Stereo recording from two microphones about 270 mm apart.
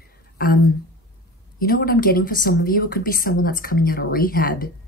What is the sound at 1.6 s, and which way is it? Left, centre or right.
Speech, left.